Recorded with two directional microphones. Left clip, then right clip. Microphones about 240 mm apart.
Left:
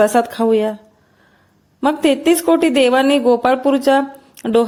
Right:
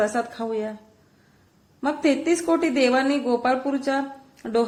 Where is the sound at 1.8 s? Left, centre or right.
Left.